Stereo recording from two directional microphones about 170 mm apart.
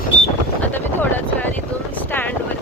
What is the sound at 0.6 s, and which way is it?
Speech, 10° left (ahead or behind).